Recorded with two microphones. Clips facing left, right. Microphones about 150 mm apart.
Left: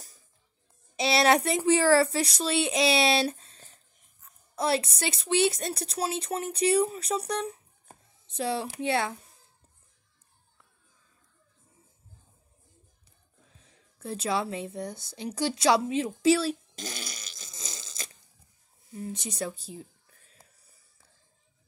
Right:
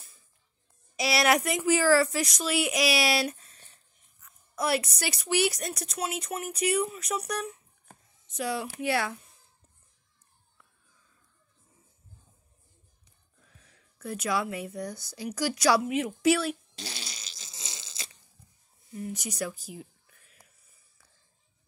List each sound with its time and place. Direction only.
0.9 s speech: 25° left (ahead or behind)
13.6 s speech: 25° left (ahead or behind)
16.7 s fart: 50° left (ahead or behind)
18.9 s a sound: 25° left (ahead or behind)